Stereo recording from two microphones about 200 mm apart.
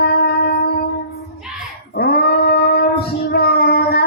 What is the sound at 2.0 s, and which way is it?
Dog, 50° left (ahead or behind).